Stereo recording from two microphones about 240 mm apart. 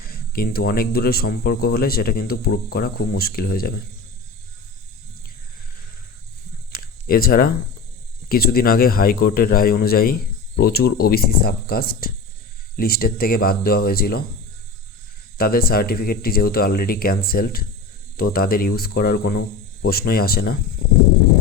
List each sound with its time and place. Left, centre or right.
0.0 s speech: left
6.7 s a sound: left
8.3 s speech: left
15.4 s speech: left